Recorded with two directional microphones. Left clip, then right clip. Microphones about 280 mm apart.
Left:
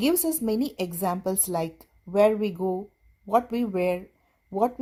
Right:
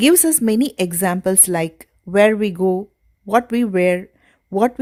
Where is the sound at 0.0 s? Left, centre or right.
Right.